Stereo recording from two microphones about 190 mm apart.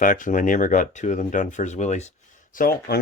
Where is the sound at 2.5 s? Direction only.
50° left (ahead or behind).